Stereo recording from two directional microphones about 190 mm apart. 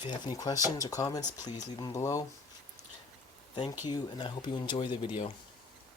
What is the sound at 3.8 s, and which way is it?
Speech, 25° left (ahead or behind).